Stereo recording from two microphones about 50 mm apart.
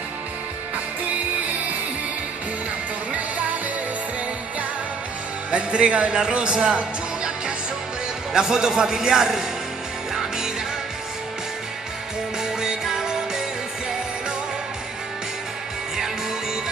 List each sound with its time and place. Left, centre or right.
3.1 s music: right
5.5 s speech: right
6.3 s music: right
8.3 s a man's voice: centre
10.1 s music: centre
12.4 s music: centre